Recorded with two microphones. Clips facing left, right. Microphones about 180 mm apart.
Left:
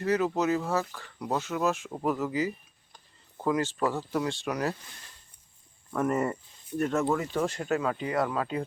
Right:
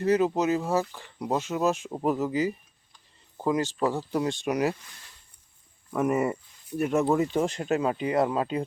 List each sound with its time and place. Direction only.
0.0 s speech: 20° right (ahead or behind)
5.9 s speech: 10° right (ahead or behind)